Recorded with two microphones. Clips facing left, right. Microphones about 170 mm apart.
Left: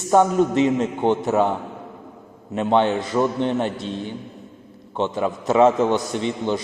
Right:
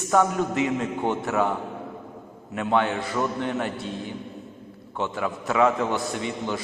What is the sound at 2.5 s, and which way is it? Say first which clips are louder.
A man's voice: left 5 dB; 25° left (ahead or behind).